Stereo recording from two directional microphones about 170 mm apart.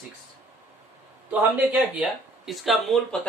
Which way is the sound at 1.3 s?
10° right (ahead or behind).